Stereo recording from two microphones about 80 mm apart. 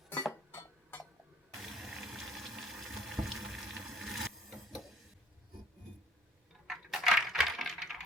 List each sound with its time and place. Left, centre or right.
0.5 s tick-tock: left
1.5 s water: centre
6.7 s a sound: centre